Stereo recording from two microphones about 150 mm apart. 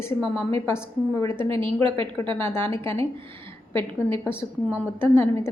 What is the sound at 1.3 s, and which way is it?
Speech, 35° right (ahead or behind).